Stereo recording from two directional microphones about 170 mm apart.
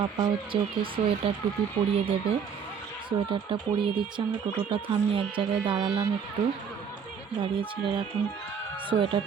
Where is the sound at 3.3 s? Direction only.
30° right (ahead or behind).